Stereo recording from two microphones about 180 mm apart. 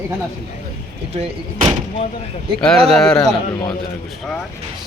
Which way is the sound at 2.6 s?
5° left (ahead or behind).